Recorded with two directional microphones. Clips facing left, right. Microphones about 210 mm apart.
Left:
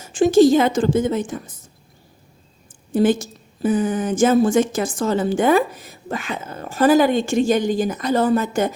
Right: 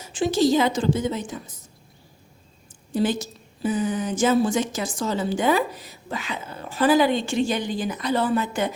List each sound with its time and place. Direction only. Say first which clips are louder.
0.0 s a woman's voice: left 8 dB; 50° left (ahead or behind)
2.9 s a woman's voice: left 6 dB; 50° left (ahead or behind)